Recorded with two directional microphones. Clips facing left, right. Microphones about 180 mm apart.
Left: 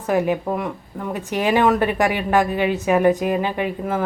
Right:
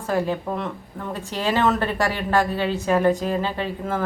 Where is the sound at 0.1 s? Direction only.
15° left (ahead or behind).